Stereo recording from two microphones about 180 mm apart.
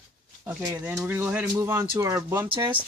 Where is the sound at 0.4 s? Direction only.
10° right (ahead or behind).